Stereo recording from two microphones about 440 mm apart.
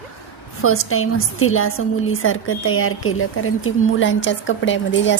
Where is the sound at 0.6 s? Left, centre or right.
Left.